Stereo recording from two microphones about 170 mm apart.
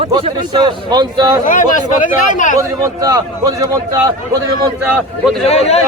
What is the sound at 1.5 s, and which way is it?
Speech, 50° left (ahead or behind).